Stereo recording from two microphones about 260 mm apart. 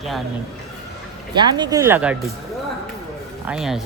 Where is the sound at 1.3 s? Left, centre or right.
Centre.